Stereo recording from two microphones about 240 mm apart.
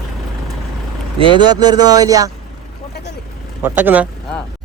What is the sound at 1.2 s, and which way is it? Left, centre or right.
Speech, centre.